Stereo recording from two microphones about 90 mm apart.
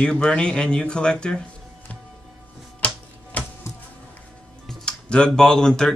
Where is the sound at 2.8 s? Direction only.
15° left (ahead or behind).